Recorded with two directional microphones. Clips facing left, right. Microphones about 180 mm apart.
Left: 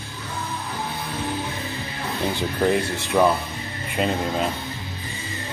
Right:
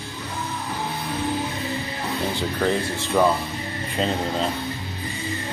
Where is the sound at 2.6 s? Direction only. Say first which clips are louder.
Left 3 dB; 15° left (ahead or behind).